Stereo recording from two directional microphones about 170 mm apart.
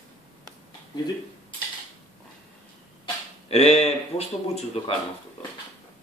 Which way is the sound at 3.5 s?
35° left (ahead or behind).